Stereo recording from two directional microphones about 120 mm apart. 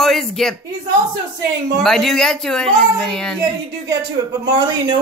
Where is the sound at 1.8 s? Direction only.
5° left (ahead or behind).